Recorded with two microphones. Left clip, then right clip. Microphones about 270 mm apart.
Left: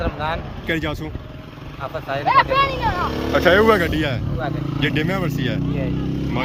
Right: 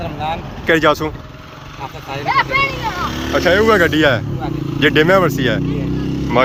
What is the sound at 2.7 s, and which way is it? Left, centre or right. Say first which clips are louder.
Speech: right 1 dB; left.